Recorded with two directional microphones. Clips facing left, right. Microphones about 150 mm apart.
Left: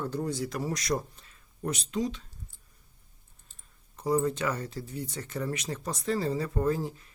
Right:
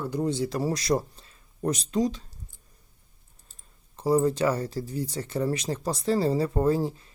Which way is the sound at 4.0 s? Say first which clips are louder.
Right 5 dB; 30° right (ahead or behind).